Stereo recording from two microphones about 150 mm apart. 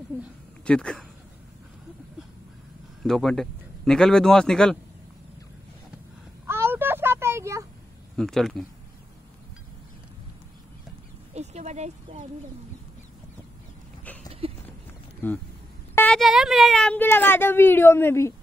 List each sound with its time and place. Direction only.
0.7 s speech: 5° left (ahead or behind)
3.0 s speech: centre (ahead or behind)
6.4 s a sound: 15° right (ahead or behind)
8.2 s speech: centre (ahead or behind)
11.3 s a sound: 50° right (ahead or behind)
14.4 s clip-clop: 40° right (ahead or behind)
15.2 s a woman's voice: 15° left (ahead or behind)
15.9 s a sound: 15° left (ahead or behind)
16.2 s a woman's voice: centre (ahead or behind); by 18.3 s 15° left (ahead or behind)